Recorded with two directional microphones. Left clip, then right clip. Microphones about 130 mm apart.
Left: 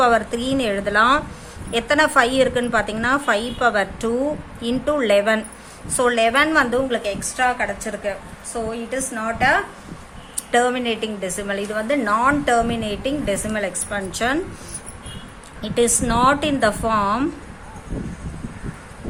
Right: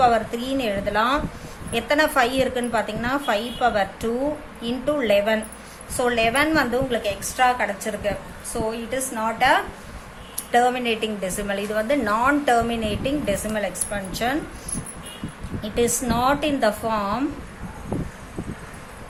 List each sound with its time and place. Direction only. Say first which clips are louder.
0.0 s a woman's voice: left 2 dB; 40° left (ahead or behind); by 9.6 s 15° left (ahead or behind)
10.5 s a woman's voice: left 1 dB; 30° left (ahead or behind)
15.6 s a woman's voice: left 3 dB; 35° left (ahead or behind)